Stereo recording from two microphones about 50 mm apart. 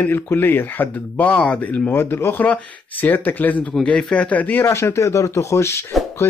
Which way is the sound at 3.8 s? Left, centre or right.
Left.